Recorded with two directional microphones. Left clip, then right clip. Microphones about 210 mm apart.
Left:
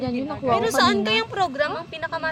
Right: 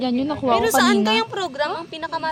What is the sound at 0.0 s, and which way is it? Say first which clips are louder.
Speech: right 4 dB; 50° right (ahead or behind).